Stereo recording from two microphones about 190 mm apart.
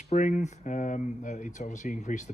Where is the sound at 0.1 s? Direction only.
40° left (ahead or behind).